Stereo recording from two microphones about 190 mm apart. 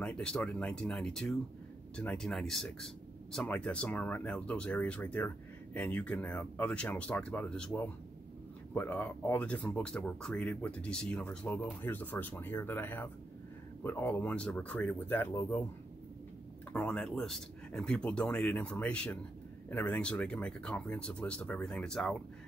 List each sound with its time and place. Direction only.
0.0 s speech: 5° left (ahead or behind)
16.7 s speech: 5° left (ahead or behind)